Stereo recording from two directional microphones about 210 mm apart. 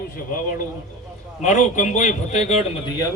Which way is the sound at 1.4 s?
35° left (ahead or behind).